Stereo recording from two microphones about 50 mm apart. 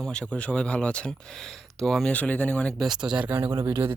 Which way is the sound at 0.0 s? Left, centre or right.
Centre.